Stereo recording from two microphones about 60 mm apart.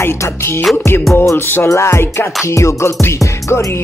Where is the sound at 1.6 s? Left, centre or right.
Left.